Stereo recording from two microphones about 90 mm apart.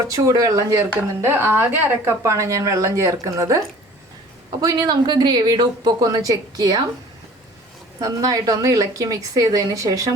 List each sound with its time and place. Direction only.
0.1 s speech: 40° right (ahead or behind)
4.6 s speech: 50° right (ahead or behind)
8.0 s speech: 40° right (ahead or behind)